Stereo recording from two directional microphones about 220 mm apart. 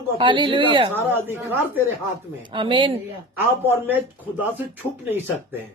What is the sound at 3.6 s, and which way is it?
Speech, 10° right (ahead or behind).